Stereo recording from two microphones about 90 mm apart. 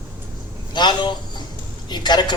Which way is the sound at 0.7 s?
55° left (ahead or behind).